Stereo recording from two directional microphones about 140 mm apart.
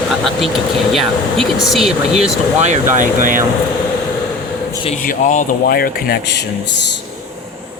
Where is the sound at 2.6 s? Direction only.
60° right (ahead or behind).